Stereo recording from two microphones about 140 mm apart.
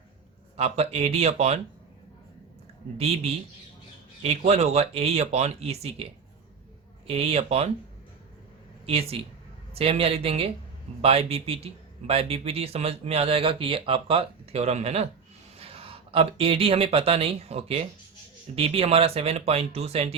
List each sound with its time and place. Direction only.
0.5 s speech: 50° right (ahead or behind)
4.2 s speech: 50° right (ahead or behind)
7.1 s speech: 45° right (ahead or behind)
8.9 s speech: 45° right (ahead or behind)